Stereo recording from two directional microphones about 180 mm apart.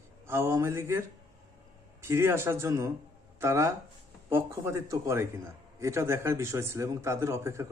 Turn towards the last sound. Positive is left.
turn(degrees=-15)  # may be behind; listen again after turning